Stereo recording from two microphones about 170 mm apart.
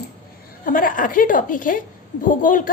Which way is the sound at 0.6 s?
55° left (ahead or behind).